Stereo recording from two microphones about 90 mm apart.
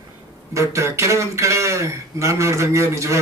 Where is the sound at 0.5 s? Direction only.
35° right (ahead or behind).